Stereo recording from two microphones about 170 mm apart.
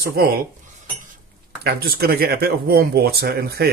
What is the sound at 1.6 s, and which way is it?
Speech, 65° right (ahead or behind).